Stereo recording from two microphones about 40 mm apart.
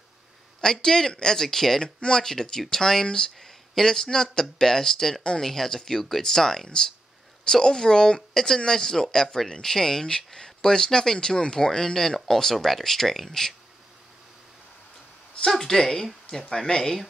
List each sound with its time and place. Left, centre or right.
0.6 s speech: centre
1.8 s speech: left
15.5 s speech: centre